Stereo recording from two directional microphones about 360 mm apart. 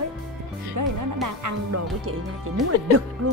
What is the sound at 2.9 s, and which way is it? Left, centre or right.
Speech, right.